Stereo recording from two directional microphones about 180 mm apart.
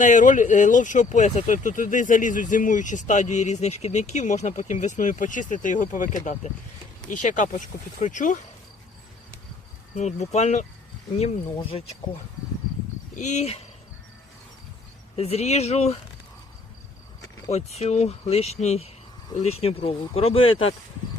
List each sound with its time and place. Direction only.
0.0 s speech: 45° left (ahead or behind)
9.9 s speech: 40° left (ahead or behind)
13.1 s speech: 40° left (ahead or behind)
15.1 s speech: 35° left (ahead or behind)
17.5 s speech: 35° left (ahead or behind)